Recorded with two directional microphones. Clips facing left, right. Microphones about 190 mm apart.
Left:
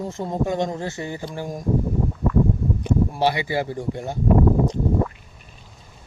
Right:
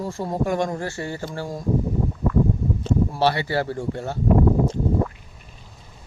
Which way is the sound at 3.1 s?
15° left (ahead or behind).